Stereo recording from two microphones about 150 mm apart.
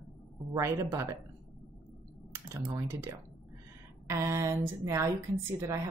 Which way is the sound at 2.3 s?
15° right (ahead or behind).